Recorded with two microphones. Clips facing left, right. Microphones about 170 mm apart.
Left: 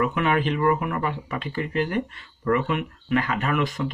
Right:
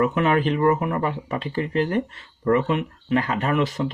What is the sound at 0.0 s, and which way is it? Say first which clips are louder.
Speech: right 3 dB; 40° right (ahead or behind).